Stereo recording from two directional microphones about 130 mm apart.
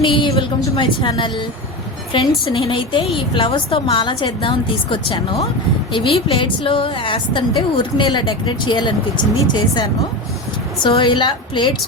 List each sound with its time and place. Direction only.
0.0 s a woman's voice: 40° left (ahead or behind)